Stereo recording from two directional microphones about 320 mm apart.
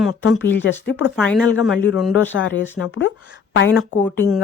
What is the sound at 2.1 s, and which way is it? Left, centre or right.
A woman's voice, left.